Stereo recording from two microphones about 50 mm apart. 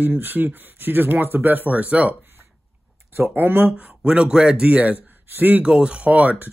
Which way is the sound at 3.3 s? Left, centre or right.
Right.